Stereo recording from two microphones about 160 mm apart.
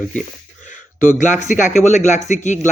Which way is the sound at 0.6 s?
50° left (ahead or behind).